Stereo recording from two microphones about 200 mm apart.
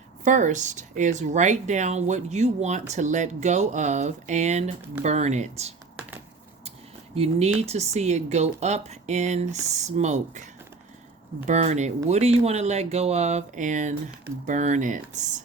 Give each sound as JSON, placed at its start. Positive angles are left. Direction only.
{"t": 0.3, "sound": "speech", "side_deg": -40}
{"t": 7.2, "sound": "speech", "side_deg": -30}